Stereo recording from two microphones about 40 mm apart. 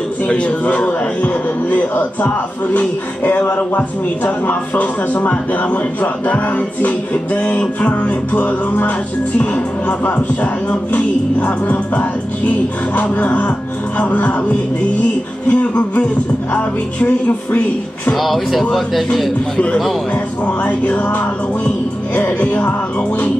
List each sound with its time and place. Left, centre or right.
0.3 s speech: left
7.3 s speech: left
15.4 s speech: left
18.1 s speech: centre
19.5 s speech: left
20.4 s speech: left